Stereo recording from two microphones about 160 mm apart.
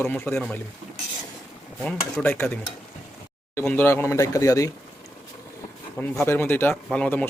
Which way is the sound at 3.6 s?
10° left (ahead or behind).